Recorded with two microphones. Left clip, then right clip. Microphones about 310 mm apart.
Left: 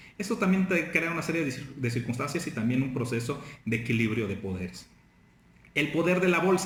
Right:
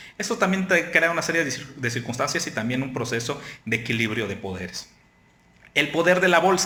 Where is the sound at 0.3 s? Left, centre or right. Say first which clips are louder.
Right 7 dB; centre.